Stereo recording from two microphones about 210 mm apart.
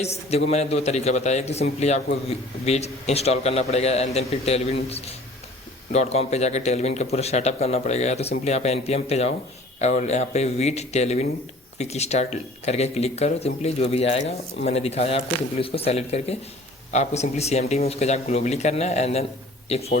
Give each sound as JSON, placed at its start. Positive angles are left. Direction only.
{"t": 0.0, "sound": "a man's voice", "side_deg": 30}